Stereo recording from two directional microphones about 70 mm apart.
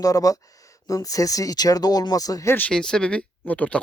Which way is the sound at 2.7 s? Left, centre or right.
Centre.